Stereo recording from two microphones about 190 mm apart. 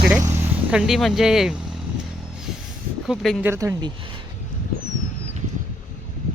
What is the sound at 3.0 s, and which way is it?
Speech, centre (ahead or behind).